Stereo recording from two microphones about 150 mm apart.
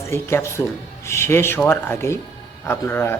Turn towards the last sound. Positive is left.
turn(degrees=15)  # may be behind; listen again after turning